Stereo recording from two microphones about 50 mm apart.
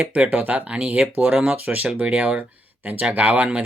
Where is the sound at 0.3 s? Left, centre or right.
Right.